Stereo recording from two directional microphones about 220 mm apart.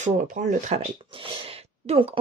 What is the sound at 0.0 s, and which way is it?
Speech, 35° right (ahead or behind).